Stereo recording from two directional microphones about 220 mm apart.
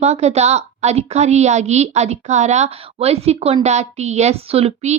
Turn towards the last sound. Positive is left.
turn(degrees=-25)  # may be behind; listen again after turning